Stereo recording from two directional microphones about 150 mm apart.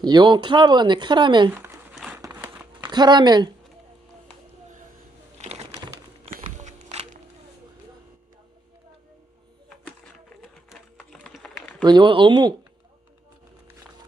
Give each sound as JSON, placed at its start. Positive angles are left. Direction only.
{"t": 0.0, "sound": "speech", "side_deg": -30}
{"t": 2.1, "sound": "a sound", "side_deg": -20}
{"t": 2.9, "sound": "speech", "side_deg": -30}
{"t": 5.4, "sound": "bird", "side_deg": -45}
{"t": 6.4, "sound": "music", "side_deg": -55}
{"t": 10.2, "sound": "a sound", "side_deg": 5}
{"t": 11.8, "sound": "speech", "side_deg": -30}